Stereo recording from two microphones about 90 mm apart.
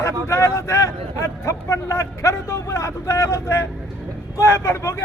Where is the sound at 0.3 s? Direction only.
35° left (ahead or behind).